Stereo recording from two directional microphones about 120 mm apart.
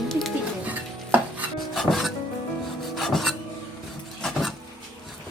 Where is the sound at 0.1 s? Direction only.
Centre (ahead or behind).